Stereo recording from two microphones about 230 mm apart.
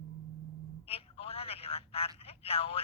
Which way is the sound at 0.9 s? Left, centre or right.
Left.